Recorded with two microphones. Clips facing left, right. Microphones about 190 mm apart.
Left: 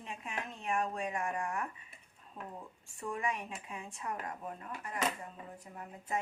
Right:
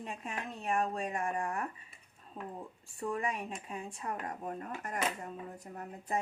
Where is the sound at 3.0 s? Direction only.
35° right (ahead or behind).